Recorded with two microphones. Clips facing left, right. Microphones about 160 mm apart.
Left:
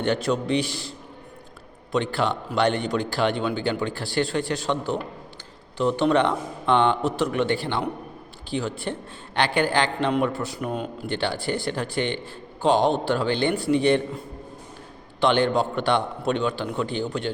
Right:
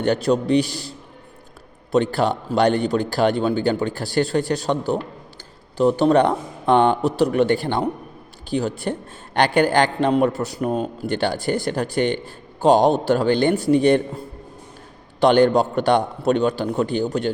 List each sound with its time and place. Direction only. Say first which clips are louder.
0.0 s a man's voice: right 5 dB; 40° right (ahead or behind)
15.2 s speech: right 6 dB; 40° right (ahead or behind)